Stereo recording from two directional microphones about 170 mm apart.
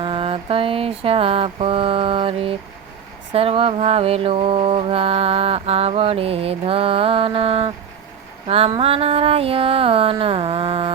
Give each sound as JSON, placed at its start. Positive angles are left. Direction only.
{"t": 0.0, "sound": "mantra", "side_deg": -35}